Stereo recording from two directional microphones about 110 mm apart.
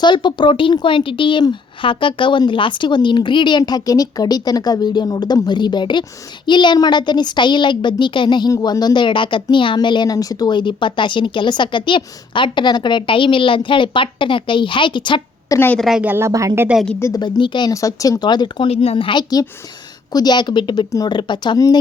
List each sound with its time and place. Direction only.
0.0 s speech: 45° left (ahead or behind)
15.4 s speech: 20° left (ahead or behind)
15.8 s speech: 5° right (ahead or behind)
16.0 s speech: 20° right (ahead or behind)
17.2 s speech: 45° left (ahead or behind)
17.7 s speech: 30° left (ahead or behind)
18.7 s speech: 60° left (ahead or behind)
20.1 s speech: 40° left (ahead or behind)